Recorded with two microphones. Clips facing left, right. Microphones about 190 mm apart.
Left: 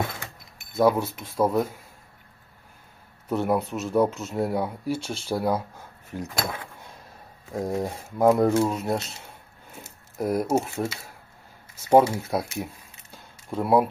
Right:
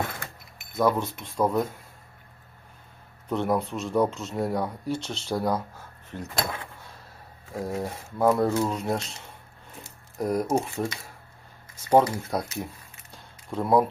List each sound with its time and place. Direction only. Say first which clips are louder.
0.8 s speech: left 3 dB; 10° left (ahead or behind)
3.2 s speech: left 1 dB; 5° left (ahead or behind)
7.7 s speech: left 3 dB; 15° left (ahead or behind)
8.7 s speech: left 1 dB; 5° left (ahead or behind)
10.2 s speech: left 1 dB; 5° left (ahead or behind)
13.1 s a sound: left 2 dB; 10° left (ahead or behind)